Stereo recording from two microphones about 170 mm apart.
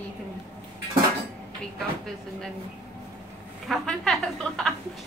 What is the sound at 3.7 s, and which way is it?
A woman's voice, centre (ahead or behind).